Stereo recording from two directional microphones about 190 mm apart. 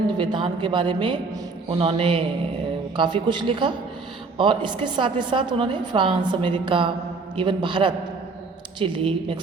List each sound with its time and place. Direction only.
0.2 s a woman's voice: 25° right (ahead or behind)